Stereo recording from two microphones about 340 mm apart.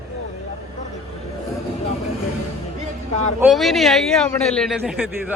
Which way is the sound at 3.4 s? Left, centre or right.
Centre.